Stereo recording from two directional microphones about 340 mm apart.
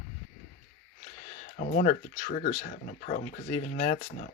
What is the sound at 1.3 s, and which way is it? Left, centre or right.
Speech, left.